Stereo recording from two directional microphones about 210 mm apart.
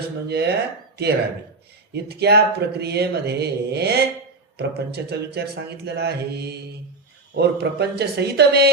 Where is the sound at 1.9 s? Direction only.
50° right (ahead or behind).